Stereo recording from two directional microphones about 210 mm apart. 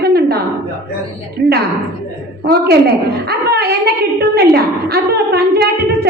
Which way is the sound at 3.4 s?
50° right (ahead or behind).